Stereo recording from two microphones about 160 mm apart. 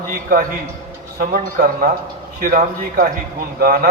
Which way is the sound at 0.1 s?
65° right (ahead or behind).